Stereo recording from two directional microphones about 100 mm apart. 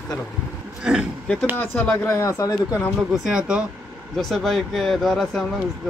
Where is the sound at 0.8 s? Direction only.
10° right (ahead or behind).